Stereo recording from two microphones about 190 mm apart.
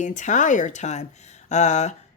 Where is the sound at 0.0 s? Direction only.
40° left (ahead or behind).